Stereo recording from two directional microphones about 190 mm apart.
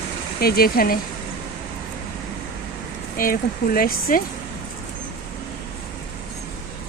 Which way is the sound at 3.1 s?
50° left (ahead or behind).